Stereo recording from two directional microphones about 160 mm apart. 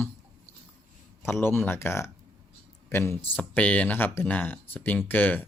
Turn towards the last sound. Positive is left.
turn(degrees=10)  # may be behind; listen again after turning